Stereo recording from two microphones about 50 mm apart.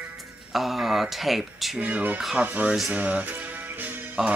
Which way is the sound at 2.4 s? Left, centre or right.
Right.